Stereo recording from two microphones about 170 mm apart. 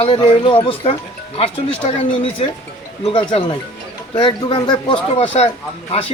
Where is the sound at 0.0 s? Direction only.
30° left (ahead or behind).